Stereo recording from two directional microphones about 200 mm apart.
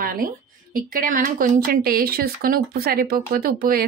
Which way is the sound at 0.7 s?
45° right (ahead or behind).